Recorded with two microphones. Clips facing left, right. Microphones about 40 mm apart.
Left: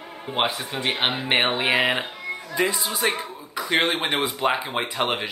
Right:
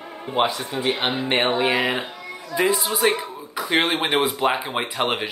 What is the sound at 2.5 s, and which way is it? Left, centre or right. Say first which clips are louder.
Speech: right 4 dB; centre.